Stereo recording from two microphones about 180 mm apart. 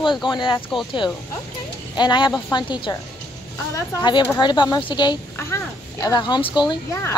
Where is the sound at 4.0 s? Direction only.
25° left (ahead or behind).